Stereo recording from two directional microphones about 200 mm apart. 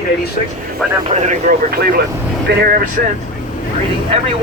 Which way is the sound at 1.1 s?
35° right (ahead or behind).